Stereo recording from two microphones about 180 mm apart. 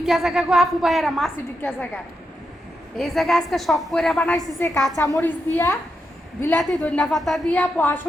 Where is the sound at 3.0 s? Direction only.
Centre (ahead or behind).